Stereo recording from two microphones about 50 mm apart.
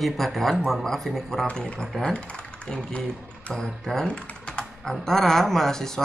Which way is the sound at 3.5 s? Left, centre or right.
Left.